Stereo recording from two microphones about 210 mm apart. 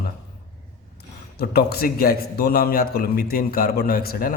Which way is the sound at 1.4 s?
50° left (ahead or behind).